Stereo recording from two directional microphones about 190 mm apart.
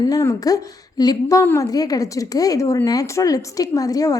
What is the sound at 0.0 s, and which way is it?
A woman's voice, 15° left (ahead or behind).